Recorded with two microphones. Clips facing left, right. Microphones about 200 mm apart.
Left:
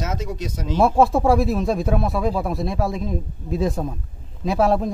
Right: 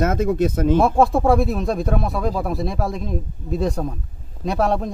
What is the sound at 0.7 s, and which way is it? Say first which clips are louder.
A man's voice: left 2 dB; centre (ahead or behind).